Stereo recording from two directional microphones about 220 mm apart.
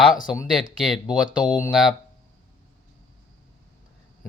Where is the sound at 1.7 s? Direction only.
Centre (ahead or behind).